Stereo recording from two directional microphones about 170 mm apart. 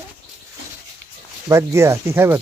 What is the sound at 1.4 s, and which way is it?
Speech, 15° right (ahead or behind).